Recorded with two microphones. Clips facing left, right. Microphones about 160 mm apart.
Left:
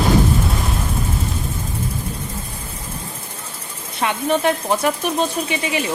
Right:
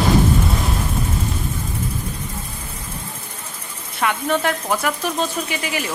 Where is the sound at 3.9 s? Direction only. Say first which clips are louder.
Left 1 dB; 20° left (ahead or behind).